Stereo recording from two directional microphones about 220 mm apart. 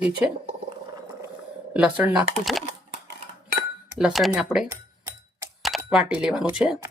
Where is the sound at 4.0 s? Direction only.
Centre (ahead or behind).